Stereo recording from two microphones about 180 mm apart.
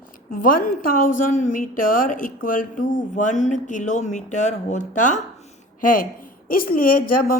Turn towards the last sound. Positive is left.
turn(degrees=50)  # may be behind; listen again after turning